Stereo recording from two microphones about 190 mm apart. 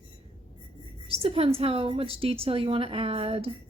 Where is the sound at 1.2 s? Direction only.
30° right (ahead or behind).